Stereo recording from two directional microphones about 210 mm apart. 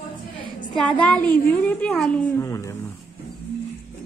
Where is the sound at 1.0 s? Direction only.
5° left (ahead or behind).